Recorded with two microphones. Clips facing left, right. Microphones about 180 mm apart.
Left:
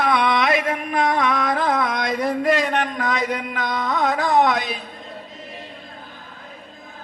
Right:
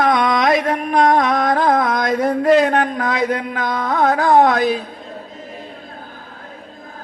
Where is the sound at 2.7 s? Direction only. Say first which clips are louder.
Right 4 dB; 35° right (ahead or behind).